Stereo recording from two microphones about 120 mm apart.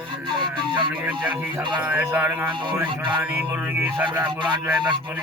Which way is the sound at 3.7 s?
15° right (ahead or behind).